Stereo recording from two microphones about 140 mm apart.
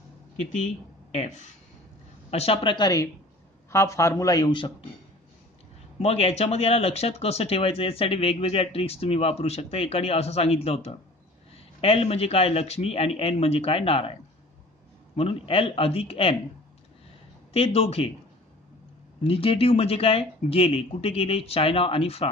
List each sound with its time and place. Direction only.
1.1 s a woman's voice: 55° left (ahead or behind); by 4.7 s 35° left (ahead or behind)
5.9 s speech: 45° left (ahead or behind)
15.1 s speech: 45° left (ahead or behind)
17.5 s speech: 45° left (ahead or behind)
19.2 s speech: 40° left (ahead or behind)